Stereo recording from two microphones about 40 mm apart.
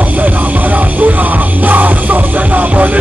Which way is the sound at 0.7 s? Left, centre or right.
Right.